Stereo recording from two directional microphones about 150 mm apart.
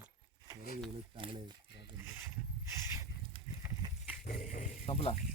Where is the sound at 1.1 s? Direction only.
35° right (ahead or behind).